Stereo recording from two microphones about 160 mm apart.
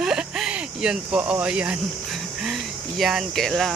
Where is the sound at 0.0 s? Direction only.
5° right (ahead or behind).